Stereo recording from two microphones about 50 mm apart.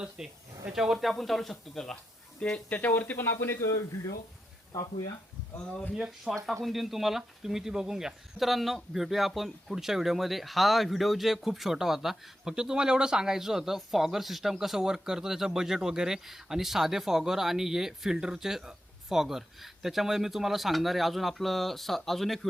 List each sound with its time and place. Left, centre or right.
0.2 s speech: centre
2.4 s speech: left
4.7 s speech: left
5.9 s speech: centre